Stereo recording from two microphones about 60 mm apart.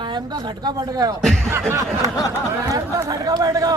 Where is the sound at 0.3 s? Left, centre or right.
Right.